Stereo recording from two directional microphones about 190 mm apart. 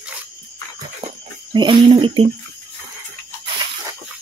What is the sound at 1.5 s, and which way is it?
Speech, 25° right (ahead or behind).